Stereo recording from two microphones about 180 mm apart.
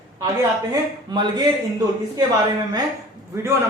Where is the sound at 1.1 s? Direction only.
25° right (ahead or behind).